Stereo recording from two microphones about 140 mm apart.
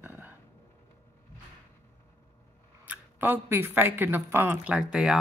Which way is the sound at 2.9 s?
15° right (ahead or behind).